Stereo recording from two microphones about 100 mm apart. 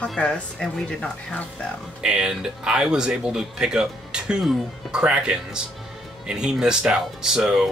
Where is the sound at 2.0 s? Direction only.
10° right (ahead or behind).